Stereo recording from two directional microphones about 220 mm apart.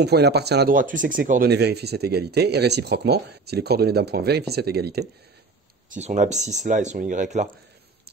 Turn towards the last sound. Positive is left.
turn(degrees=-35)  # may be behind; listen again after turning